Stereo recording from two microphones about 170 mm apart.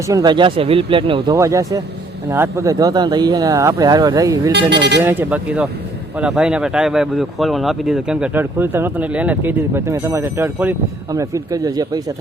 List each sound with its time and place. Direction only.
0.1 s speech: 25° right (ahead or behind)
1.4 s speech: 20° right (ahead or behind)
4.5 s speech: 85° right
5.0 s speech: 10° right (ahead or behind)